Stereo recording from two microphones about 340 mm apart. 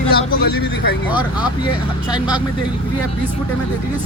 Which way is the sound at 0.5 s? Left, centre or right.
Left.